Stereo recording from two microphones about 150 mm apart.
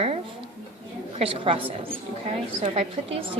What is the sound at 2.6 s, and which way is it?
Speech, 40° right (ahead or behind).